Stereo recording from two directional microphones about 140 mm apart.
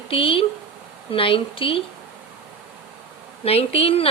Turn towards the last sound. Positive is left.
turn(degrees=45)  # may be behind; listen again after turning